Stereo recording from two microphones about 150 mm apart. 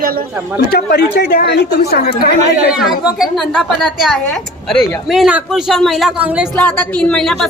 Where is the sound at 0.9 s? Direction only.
90° left.